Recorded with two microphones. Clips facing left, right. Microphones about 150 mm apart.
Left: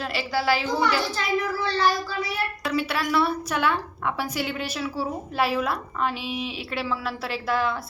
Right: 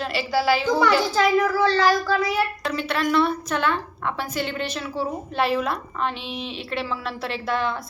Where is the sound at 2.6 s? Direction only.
10° left (ahead or behind).